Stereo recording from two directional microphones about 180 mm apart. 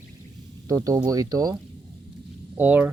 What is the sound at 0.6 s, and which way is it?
Speech, 20° right (ahead or behind).